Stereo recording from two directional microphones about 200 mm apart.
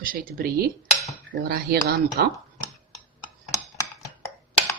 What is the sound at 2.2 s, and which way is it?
Speech, 50° right (ahead or behind).